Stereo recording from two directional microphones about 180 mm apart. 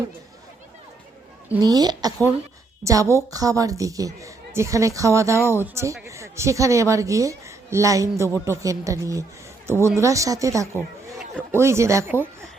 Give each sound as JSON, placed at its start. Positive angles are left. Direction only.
{"t": 1.5, "sound": "a woman's voice", "side_deg": -20}